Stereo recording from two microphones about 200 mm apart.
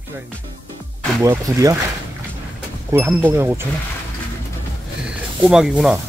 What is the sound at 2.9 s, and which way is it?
Speech, 10° right (ahead or behind).